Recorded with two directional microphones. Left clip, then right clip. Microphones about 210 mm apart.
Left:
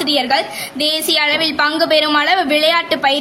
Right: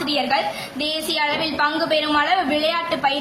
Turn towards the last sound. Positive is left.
turn(degrees=40)  # may be behind; listen again after turning